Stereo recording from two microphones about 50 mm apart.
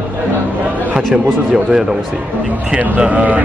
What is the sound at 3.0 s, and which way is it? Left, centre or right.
Speech, right.